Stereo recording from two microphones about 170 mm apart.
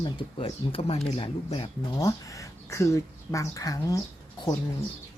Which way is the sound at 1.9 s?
20° left (ahead or behind).